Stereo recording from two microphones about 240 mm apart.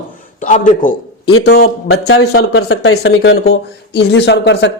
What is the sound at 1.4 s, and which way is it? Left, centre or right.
Speech, left.